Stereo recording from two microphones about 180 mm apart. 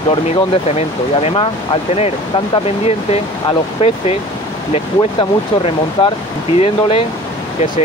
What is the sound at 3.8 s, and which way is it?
Speech, 35° left (ahead or behind).